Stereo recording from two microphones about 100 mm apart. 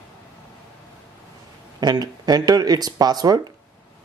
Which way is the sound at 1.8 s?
45° right (ahead or behind).